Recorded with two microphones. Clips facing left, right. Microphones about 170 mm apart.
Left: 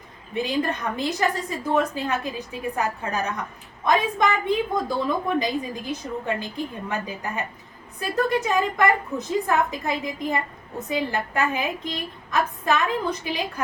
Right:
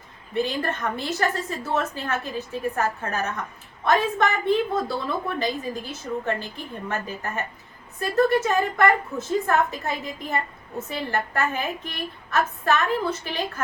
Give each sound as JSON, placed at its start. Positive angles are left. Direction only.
{"t": 0.3, "sound": "a woman's voice", "side_deg": 15}